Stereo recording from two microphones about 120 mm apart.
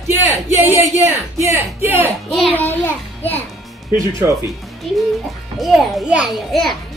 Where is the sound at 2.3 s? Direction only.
Centre (ahead or behind).